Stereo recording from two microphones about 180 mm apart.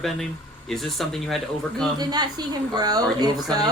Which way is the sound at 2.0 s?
20° right (ahead or behind).